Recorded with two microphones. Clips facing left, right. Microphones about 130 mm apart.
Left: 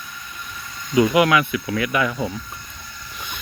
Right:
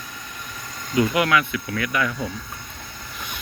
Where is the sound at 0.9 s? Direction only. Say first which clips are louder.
Left 4 dB; 10° left (ahead or behind).